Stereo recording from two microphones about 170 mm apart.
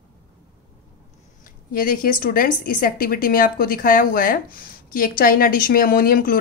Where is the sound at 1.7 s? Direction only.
55° left (ahead or behind).